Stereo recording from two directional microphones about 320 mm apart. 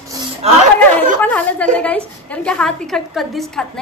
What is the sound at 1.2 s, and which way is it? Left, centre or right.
A woman's voice, centre.